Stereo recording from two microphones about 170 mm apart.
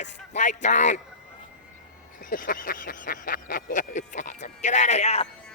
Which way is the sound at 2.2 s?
55° left (ahead or behind).